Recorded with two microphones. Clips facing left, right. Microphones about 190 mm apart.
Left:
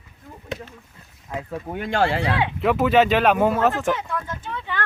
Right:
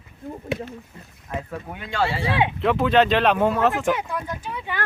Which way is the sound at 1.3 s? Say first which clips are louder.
Even; 15° left (ahead or behind).